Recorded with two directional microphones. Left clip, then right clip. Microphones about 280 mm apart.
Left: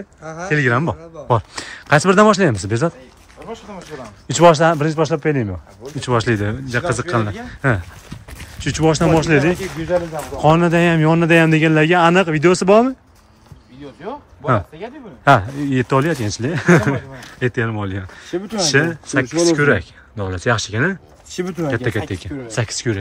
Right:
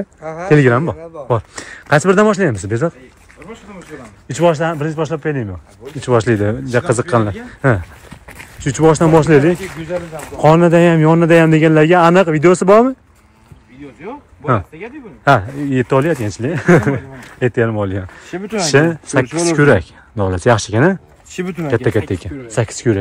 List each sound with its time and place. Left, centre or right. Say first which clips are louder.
0.2 s speech: right 2 dB; right
0.5 s a man's voice: right 6 dB; centre
0.7 s speech: right 2 dB; centre
4.3 s speech: left 3 dB; centre
9.5 s speech: even; left
10.4 s speech: right 4 dB; centre
14.0 s speech: right 1 dB; centre